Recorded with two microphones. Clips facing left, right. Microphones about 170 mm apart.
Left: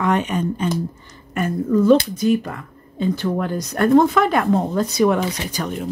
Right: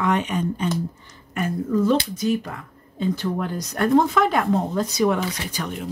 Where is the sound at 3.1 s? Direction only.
65° left (ahead or behind).